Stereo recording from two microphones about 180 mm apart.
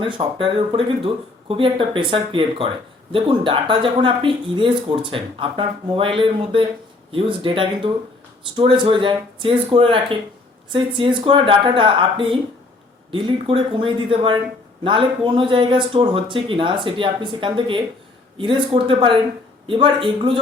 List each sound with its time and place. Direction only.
0.0 s speech: 30° right (ahead or behind)